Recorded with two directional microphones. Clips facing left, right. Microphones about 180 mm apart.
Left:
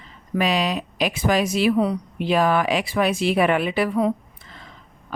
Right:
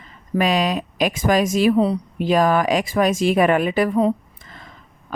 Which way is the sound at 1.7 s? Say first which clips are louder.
Right 3 dB; 30° right (ahead or behind).